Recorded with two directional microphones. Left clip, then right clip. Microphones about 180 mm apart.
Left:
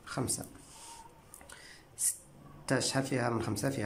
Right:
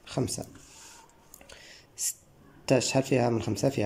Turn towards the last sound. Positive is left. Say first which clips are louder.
# right 6 dB
turn(degrees=-15)  # may be behind; listen again after turning